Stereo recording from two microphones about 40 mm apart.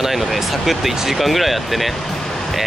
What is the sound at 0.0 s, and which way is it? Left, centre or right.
Speech, centre.